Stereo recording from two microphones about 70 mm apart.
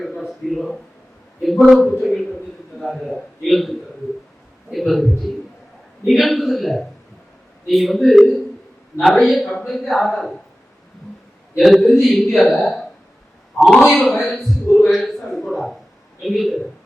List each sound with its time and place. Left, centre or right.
0.3 s speech: centre
11.5 s a man's voice: centre
13.8 s a man's voice: left
14.1 s a sound: centre
16.2 s speech: centre